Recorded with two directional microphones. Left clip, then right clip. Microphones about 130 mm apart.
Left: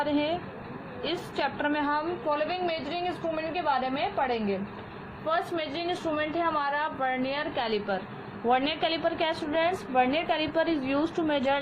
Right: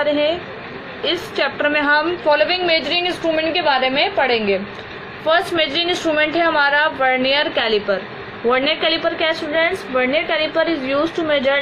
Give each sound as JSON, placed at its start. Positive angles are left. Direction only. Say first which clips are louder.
{"t": 0.0, "sound": "a woman's voice", "louder": "right 11 dB", "side_deg": 20}
{"t": 7.6, "sound": "a woman's voice", "louder": "right 11 dB", "side_deg": 20}